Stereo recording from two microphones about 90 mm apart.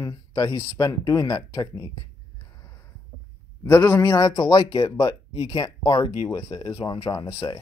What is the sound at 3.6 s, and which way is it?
Speech, 25° left (ahead or behind).